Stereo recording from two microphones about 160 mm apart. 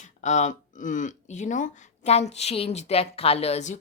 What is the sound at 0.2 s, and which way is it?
Speech, 50° left (ahead or behind).